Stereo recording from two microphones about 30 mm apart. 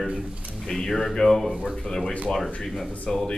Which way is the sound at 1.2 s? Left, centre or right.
Left.